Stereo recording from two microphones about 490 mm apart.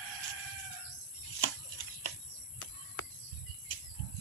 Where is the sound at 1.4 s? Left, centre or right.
Left.